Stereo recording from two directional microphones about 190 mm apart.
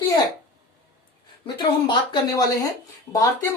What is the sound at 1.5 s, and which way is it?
A woman's voice, 20° left (ahead or behind).